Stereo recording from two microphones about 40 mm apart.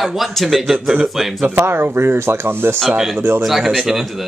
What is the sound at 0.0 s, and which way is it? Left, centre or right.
Speech, centre.